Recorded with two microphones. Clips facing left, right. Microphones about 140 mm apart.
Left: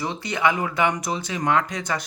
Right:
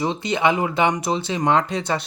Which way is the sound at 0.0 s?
20° right (ahead or behind).